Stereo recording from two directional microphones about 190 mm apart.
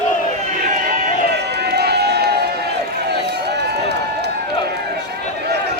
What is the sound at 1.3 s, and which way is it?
Run, 60° right (ahead or behind).